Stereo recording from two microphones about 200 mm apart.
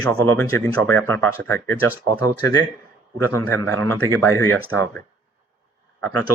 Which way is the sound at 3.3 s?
10° left (ahead or behind).